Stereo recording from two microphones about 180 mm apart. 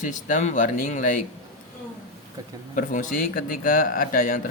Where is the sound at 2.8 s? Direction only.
50° left (ahead or behind).